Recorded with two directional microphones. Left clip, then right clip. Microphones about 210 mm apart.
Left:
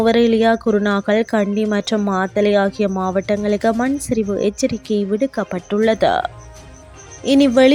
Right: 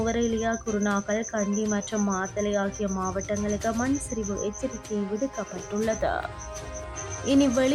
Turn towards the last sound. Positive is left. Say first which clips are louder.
# left 10 dB
turn(degrees=35)  # may be behind; listen again after turning